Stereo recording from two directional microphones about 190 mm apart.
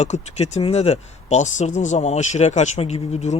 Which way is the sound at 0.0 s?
35° left (ahead or behind).